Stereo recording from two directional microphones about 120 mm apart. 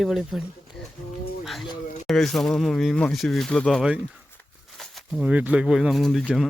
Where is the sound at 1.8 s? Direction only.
80° left.